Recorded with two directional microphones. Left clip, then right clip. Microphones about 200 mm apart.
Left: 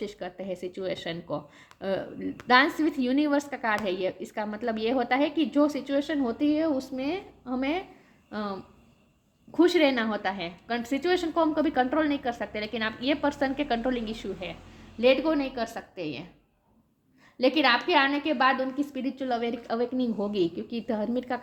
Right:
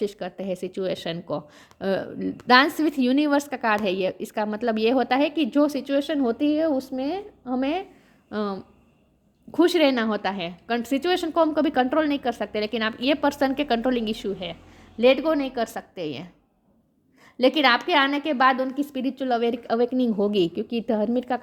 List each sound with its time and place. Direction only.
0.0 s a woman's voice: 45° right (ahead or behind)
17.3 s a woman's voice: 45° right (ahead or behind)